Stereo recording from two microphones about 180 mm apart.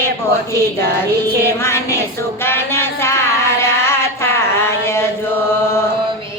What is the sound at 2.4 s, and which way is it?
Music, 15° left (ahead or behind).